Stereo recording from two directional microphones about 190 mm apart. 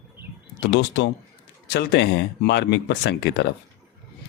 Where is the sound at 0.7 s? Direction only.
70° left (ahead or behind).